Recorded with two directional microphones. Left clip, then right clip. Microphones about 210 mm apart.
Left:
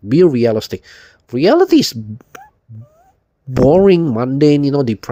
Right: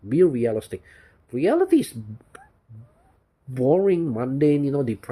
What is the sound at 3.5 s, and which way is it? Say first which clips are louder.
Speech: left 10 dB; 50° left (ahead or behind).